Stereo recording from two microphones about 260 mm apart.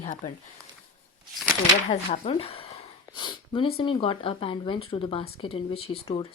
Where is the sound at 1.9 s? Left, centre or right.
Left.